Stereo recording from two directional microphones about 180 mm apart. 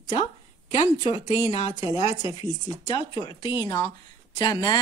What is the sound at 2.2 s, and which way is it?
Speech, 25° left (ahead or behind).